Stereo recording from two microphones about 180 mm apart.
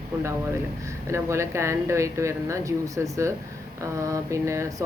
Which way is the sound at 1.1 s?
15° right (ahead or behind).